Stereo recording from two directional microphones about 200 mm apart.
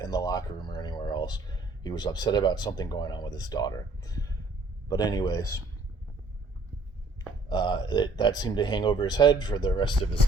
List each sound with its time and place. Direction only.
0.0 s a man's voice: 20° left (ahead or behind)
7.5 s a man's voice: 20° left (ahead or behind)